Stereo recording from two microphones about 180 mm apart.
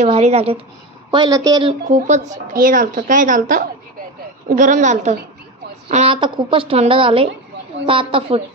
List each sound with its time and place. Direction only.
0.0 s a woman's voice: 35° right (ahead or behind)
1.1 s a woman's voice: 25° right (ahead or behind)
1.9 s a woman's voice: 40° right (ahead or behind)